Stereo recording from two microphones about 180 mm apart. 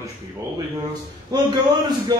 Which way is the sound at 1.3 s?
25° right (ahead or behind).